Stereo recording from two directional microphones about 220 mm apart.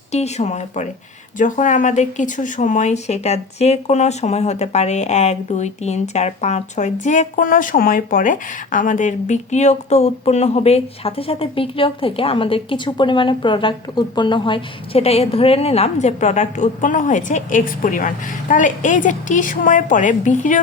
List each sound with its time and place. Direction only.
0.1 s speech: 30° left (ahead or behind)